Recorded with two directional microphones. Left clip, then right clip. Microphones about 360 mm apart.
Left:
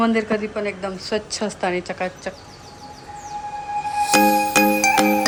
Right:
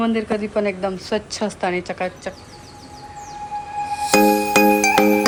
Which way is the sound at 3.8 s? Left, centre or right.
Centre.